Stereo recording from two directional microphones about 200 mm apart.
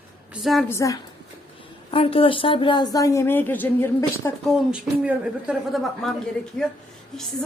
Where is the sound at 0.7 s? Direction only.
15° left (ahead or behind).